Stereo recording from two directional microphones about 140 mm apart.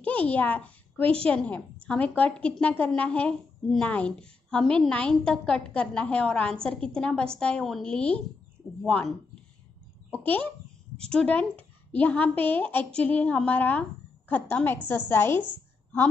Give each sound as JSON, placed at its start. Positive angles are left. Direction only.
{"t": 0.0, "sound": "a child's voice", "side_deg": 10}
{"t": 10.1, "sound": "a child's voice", "side_deg": 10}